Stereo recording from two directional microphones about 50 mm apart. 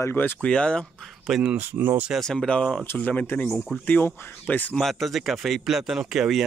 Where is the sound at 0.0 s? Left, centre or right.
Left.